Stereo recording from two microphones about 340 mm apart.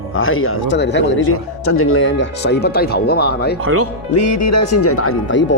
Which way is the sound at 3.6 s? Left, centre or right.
Right.